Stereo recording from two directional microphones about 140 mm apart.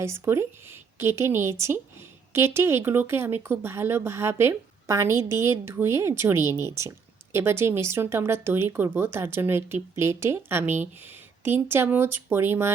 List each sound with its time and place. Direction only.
0.0 s a woman's voice: 20° right (ahead or behind)